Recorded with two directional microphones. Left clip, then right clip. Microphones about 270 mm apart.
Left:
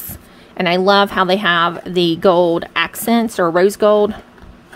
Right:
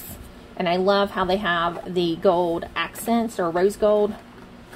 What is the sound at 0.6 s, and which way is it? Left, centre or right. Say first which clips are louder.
Speech: left 7 dB; left.